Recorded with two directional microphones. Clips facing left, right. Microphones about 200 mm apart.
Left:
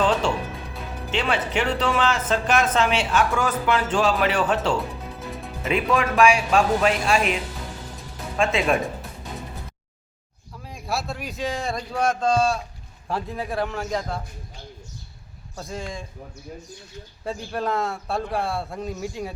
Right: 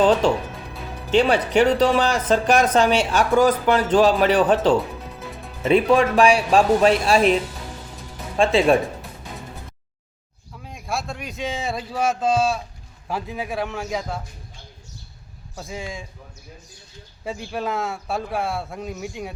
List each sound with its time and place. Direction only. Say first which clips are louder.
1.1 s speech: right 7 dB; 40° right (ahead or behind)
5.6 s speech: right 6 dB; 35° right (ahead or behind)
8.4 s speech: right 5 dB; 30° right (ahead or behind)
10.6 s speech: even; centre (ahead or behind)
15.5 s speech: even; 5° right (ahead or behind)
17.2 s speech: even; centre (ahead or behind)